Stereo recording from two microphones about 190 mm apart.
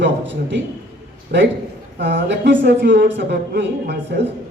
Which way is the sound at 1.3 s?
50° right (ahead or behind).